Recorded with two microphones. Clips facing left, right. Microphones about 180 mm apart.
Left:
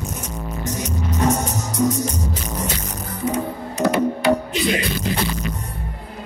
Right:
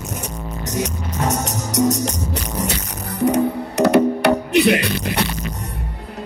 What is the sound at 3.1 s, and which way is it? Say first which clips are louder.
Music: right 7 dB; 70° right (ahead or behind).